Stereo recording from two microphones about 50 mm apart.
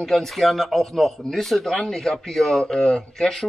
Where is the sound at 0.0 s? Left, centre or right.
Centre.